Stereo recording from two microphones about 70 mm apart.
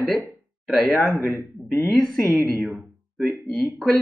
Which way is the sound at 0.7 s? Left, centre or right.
Centre.